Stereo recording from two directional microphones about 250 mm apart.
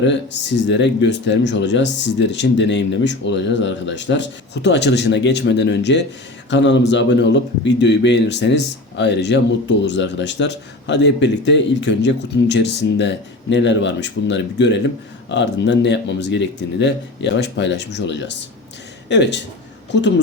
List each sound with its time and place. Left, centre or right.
0.7 s speech: left